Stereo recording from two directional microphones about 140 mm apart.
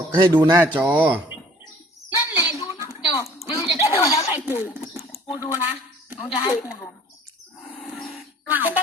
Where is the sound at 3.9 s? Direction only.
25° left (ahead or behind).